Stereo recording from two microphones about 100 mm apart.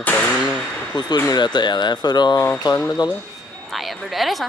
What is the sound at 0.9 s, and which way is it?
Speech, 45° left (ahead or behind).